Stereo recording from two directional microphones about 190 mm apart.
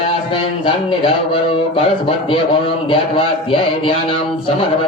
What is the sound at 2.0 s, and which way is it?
A man's voice, 30° left (ahead or behind).